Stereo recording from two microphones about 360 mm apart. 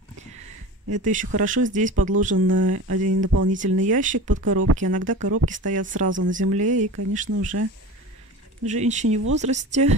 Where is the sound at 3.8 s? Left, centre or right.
Right.